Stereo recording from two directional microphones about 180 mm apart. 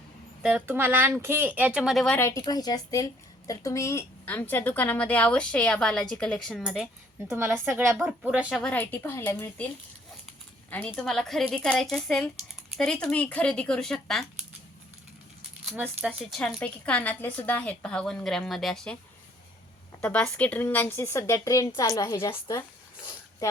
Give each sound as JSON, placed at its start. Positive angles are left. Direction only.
{"t": 0.4, "sound": "speech", "side_deg": -10}
{"t": 2.1, "sound": "a woman's voice", "side_deg": 15}
{"t": 7.3, "sound": "speech", "side_deg": -10}
{"t": 7.9, "sound": "a woman's voice", "side_deg": -5}
{"t": 10.7, "sound": "a woman's voice", "side_deg": 5}
{"t": 15.7, "sound": "a woman's voice", "side_deg": -5}
{"t": 20.0, "sound": "a woman's voice", "side_deg": 10}